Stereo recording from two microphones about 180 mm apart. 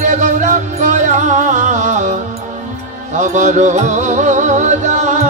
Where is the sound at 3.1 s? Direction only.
40° right (ahead or behind).